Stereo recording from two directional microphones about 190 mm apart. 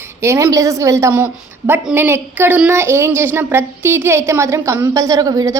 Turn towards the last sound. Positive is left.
turn(degrees=-20)  # may be behind; listen again after turning